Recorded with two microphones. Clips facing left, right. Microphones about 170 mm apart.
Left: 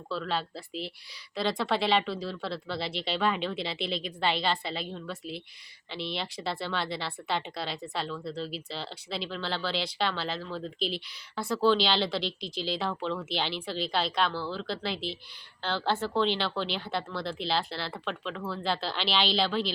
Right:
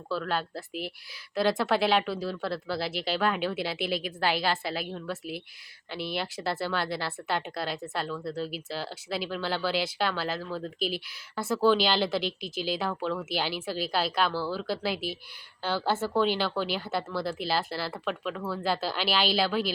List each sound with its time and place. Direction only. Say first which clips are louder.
0.1 s a woman's voice: right 2 dB; centre (ahead or behind)